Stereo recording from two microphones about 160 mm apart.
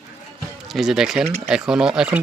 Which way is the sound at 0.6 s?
Centre (ahead or behind).